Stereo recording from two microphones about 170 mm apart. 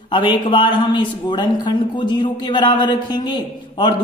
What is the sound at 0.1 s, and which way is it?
A man's voice, 30° left (ahead or behind).